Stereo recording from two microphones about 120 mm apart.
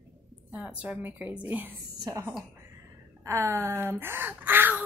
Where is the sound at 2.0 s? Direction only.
30° right (ahead or behind).